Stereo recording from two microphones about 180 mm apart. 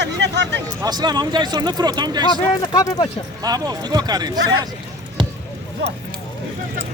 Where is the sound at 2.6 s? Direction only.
20° left (ahead or behind).